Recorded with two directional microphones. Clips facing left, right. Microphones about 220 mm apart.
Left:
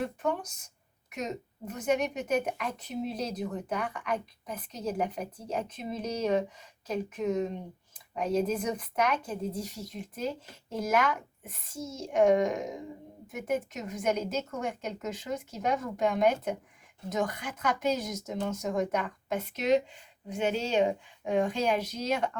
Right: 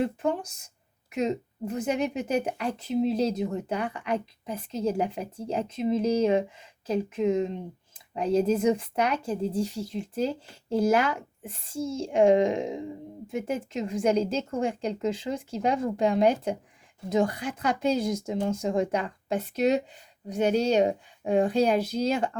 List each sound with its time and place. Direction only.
0.0 s speech: 25° right (ahead or behind)